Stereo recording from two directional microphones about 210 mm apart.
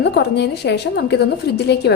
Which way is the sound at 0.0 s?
55° left (ahead or behind).